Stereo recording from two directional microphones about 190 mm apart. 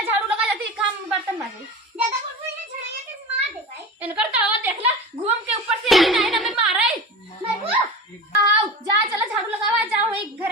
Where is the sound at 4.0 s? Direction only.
10° right (ahead or behind).